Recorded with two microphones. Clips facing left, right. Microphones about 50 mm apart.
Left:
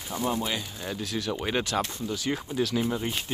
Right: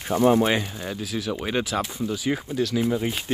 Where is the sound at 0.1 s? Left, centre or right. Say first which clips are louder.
Right 10 dB; right.